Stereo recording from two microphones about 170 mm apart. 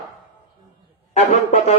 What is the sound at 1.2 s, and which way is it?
Speech, 40° left (ahead or behind).